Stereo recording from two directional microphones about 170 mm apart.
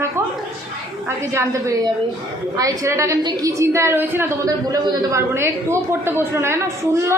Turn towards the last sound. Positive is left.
turn(degrees=-15)  # may be behind; listen again after turning